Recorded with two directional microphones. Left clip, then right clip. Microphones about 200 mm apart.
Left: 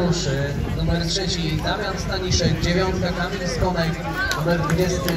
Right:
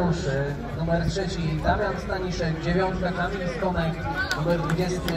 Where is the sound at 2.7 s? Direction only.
35° right (ahead or behind).